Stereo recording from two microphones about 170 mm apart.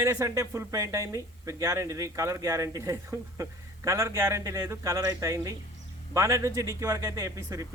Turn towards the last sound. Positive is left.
turn(degrees=-20)  # may be behind; listen again after turning